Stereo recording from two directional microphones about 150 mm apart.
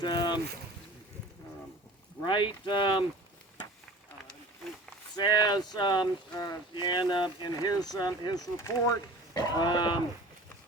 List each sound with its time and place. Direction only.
0.0 s boat: 30° left (ahead or behind)
2.2 s speech: 30° left (ahead or behind)
5.1 s speech: 30° left (ahead or behind)